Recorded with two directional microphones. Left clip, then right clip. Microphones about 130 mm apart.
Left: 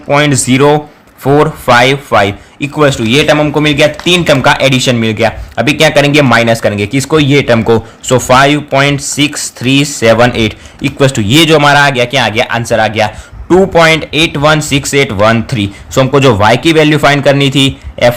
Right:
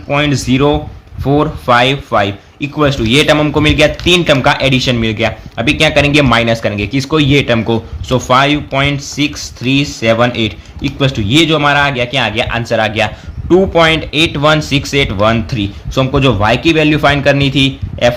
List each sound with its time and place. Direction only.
0.1 s speech: 40° left (ahead or behind); by 7.5 s 25° left (ahead or behind)
7.5 s speech: 45° left (ahead or behind); by 13.1 s 20° left (ahead or behind)
13.5 s speech: 35° left (ahead or behind)